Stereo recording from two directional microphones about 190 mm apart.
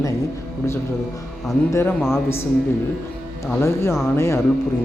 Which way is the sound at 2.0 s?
Centre (ahead or behind).